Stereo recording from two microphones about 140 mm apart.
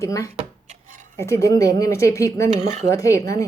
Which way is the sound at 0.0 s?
20° left (ahead or behind).